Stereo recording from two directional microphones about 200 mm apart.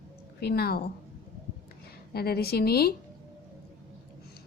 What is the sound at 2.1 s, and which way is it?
Speech, 50° left (ahead or behind).